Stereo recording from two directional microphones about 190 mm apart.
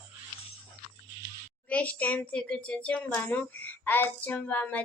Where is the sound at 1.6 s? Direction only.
5° left (ahead or behind).